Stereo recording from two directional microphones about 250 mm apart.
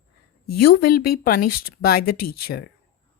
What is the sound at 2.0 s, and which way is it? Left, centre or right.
Speech, left.